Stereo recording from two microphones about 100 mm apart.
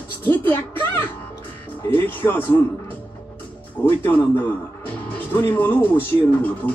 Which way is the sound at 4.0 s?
20° left (ahead or behind).